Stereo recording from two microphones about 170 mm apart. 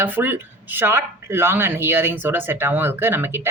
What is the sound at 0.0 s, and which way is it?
A woman's voice, 10° right (ahead or behind).